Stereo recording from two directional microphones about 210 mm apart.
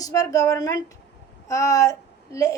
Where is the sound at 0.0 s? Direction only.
15° left (ahead or behind).